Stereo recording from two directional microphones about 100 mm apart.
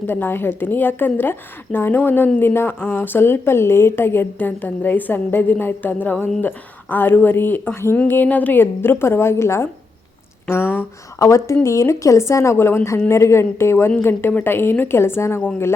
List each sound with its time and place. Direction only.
0.1 s a woman's voice: 20° left (ahead or behind)